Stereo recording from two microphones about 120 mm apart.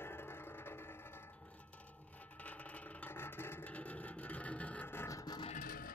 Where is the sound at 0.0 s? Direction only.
20° left (ahead or behind).